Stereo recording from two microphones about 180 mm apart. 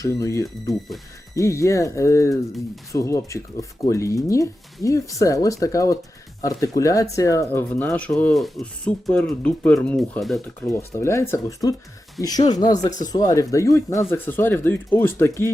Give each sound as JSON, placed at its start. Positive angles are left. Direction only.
{"t": 0.0, "sound": "speech", "side_deg": 15}
{"t": 0.4, "sound": "speech", "side_deg": 0}
{"t": 1.4, "sound": "speech", "side_deg": 15}
{"t": 10.7, "sound": "speech", "side_deg": 15}